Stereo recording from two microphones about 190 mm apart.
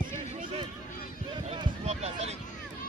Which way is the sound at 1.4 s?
35° right (ahead or behind).